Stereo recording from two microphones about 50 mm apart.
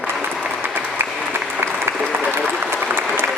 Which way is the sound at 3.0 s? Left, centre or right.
Right.